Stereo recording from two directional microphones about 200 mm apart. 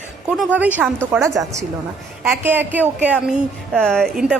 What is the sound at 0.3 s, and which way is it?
A woman's voice, 5° right (ahead or behind).